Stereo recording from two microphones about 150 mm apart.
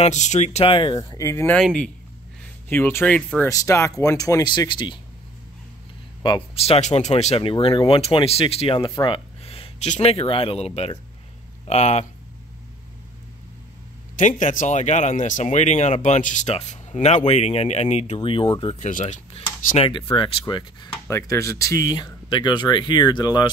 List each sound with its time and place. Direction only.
0.0 s speech: 50° left (ahead or behind); by 1.6 s 15° left (ahead or behind)
1.6 s speech: 5° left (ahead or behind)
3.4 s speech: 20° left (ahead or behind)
6.5 s speech: 40° left (ahead or behind)
14.1 s speech: 55° left (ahead or behind); by 18.5 s 35° left (ahead or behind)
18.8 s speech: 55° left (ahead or behind)
19.3 s speech: 35° left (ahead or behind)